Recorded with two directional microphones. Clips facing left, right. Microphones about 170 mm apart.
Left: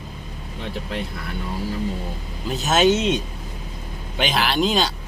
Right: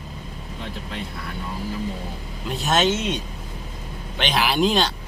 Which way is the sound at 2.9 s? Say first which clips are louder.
Left 5 dB; 20° left (ahead or behind).